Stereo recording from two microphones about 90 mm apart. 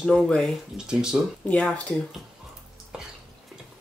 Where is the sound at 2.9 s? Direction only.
5° right (ahead or behind).